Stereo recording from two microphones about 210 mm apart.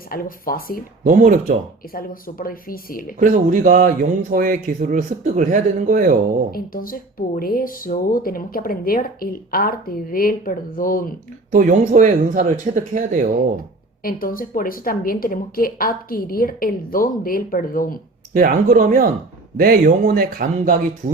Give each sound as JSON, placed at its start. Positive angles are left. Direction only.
{"t": 0.1, "sound": "speech", "side_deg": 45}
{"t": 1.0, "sound": "speech", "side_deg": -40}
{"t": 1.9, "sound": "speech", "side_deg": 45}
{"t": 3.2, "sound": "speech", "side_deg": -40}
{"t": 6.5, "sound": "speech", "side_deg": 45}
{"t": 11.5, "sound": "speech", "side_deg": -40}
{"t": 14.0, "sound": "speech", "side_deg": 45}
{"t": 18.3, "sound": "speech", "side_deg": -40}